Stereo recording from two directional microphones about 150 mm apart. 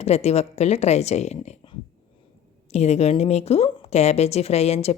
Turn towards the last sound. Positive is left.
turn(degrees=45)  # may be behind; listen again after turning